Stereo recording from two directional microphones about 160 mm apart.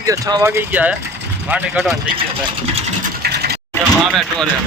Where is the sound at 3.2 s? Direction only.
90° right.